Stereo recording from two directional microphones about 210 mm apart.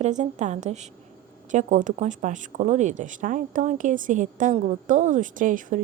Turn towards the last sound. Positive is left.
turn(degrees=-40)  # may be behind; listen again after turning